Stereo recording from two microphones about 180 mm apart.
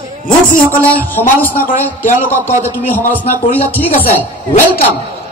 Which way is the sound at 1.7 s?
45° left (ahead or behind).